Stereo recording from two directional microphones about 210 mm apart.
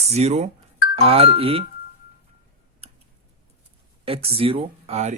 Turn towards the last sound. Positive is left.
turn(degrees=-30)  # may be behind; listen again after turning